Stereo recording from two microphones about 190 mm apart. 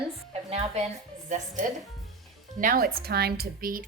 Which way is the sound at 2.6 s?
50° right (ahead or behind).